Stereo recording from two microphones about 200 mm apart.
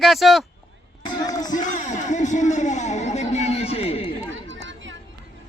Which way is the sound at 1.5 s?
40° left (ahead or behind).